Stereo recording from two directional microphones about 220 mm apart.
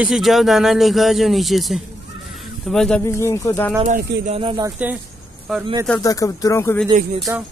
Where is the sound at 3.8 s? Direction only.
35° right (ahead or behind).